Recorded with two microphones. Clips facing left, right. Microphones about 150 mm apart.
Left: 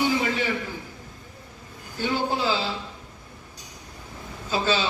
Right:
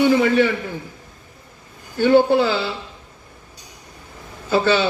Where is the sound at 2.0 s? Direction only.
70° right (ahead or behind).